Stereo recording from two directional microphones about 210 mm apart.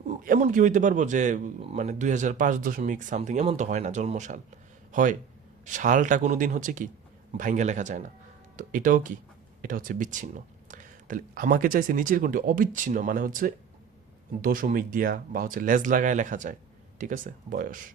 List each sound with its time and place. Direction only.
0.1 s a man's voice: 35° right (ahead or behind)